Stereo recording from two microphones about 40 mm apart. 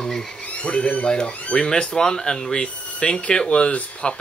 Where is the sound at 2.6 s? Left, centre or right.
Left.